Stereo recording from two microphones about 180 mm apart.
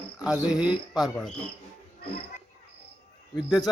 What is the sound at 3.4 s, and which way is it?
Speech, 5° right (ahead or behind).